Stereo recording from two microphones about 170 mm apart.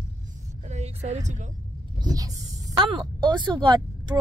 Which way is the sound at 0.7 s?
40° right (ahead or behind).